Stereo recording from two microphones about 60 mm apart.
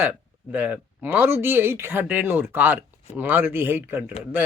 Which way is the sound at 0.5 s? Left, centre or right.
Right.